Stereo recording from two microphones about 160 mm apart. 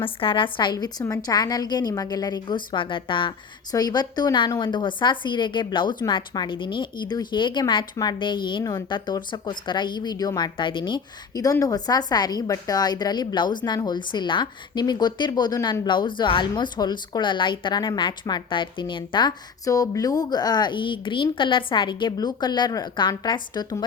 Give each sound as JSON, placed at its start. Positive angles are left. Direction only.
{"t": 0.0, "sound": "a woman's voice", "side_deg": 35}